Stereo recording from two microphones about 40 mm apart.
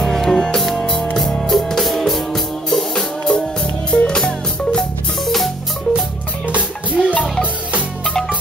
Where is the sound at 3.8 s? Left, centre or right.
Left.